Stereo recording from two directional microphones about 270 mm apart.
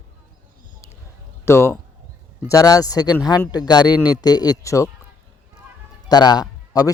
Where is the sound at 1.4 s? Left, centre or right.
Centre.